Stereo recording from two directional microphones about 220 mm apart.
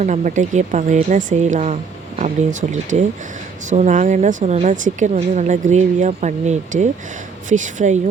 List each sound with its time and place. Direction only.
0.0 s a woman's voice: 35° right (ahead or behind)